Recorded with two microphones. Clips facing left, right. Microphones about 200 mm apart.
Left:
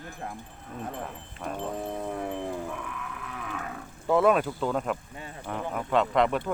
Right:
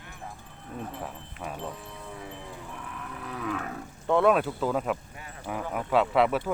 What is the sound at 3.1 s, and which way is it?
Livestock, 35° right (ahead or behind).